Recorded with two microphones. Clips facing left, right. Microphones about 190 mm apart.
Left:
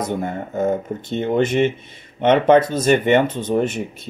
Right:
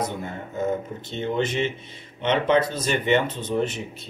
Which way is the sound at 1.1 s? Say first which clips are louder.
Left 7 dB; 50° left (ahead or behind).